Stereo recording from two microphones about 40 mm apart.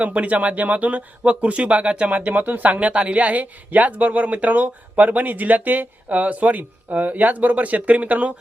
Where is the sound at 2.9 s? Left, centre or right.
Right.